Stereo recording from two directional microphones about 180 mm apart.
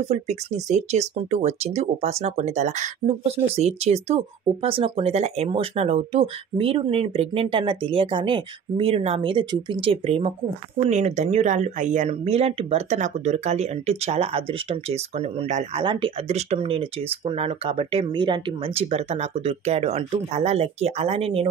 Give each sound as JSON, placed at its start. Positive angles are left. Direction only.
{"t": 0.1, "sound": "speech", "side_deg": -40}
{"t": 15.8, "sound": "speech", "side_deg": -30}